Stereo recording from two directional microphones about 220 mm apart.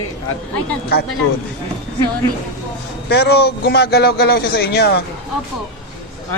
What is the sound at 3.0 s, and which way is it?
A man's voice, 50° left (ahead or behind).